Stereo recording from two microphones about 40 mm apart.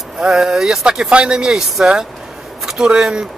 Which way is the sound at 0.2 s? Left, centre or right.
Centre.